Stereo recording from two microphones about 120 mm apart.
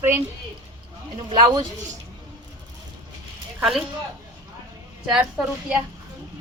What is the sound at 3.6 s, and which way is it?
Speech, 5° right (ahead or behind).